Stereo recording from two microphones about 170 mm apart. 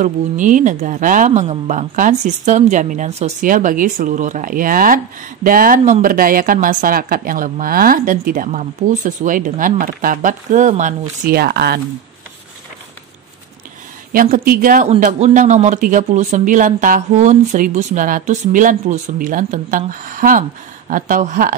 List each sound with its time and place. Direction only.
0.0 s speech: 50° right (ahead or behind); by 11.8 s 65° right (ahead or behind)
14.1 s speech: 55° right (ahead or behind)
14.9 s speech: 45° right (ahead or behind)